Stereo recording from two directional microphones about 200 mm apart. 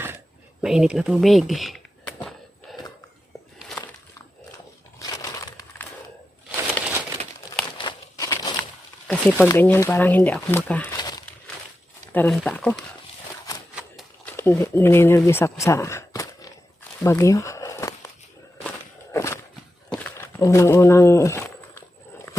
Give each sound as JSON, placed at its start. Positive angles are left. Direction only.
{"t": 0.6, "sound": "speech", "side_deg": -5}
{"t": 2.7, "sound": "a sound", "side_deg": 0}
{"t": 4.9, "sound": "crushing", "side_deg": 20}
{"t": 7.8, "sound": "crumpling", "side_deg": 20}
{"t": 9.0, "sound": "speech", "side_deg": 10}
{"t": 10.9, "sound": "crumpling", "side_deg": 20}
{"t": 12.1, "sound": "speech", "side_deg": 5}
{"t": 14.3, "sound": "speech", "side_deg": 10}
{"t": 17.0, "sound": "a sound", "side_deg": 15}
{"t": 19.1, "sound": "a sound", "side_deg": 15}